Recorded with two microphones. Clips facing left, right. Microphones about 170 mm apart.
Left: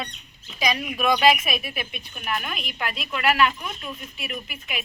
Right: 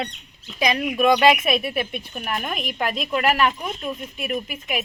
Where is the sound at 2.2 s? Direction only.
45° right (ahead or behind).